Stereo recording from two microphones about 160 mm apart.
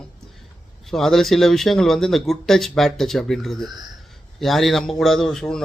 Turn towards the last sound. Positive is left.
turn(degrees=5)  # may be behind; listen again after turning